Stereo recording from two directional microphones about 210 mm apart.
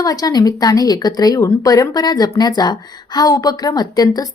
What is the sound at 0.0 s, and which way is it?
Speech, 20° left (ahead or behind).